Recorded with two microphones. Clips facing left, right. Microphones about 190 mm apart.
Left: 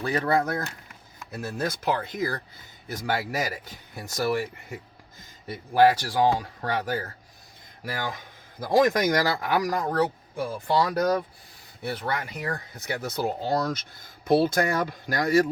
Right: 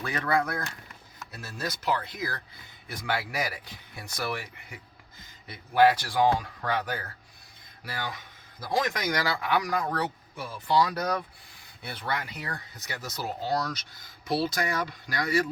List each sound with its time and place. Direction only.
0.0 s a man's voice: 35° left (ahead or behind)
1.3 s a man's voice: 55° left (ahead or behind); by 10.6 s 30° left (ahead or behind)
11.8 s speech: 45° left (ahead or behind)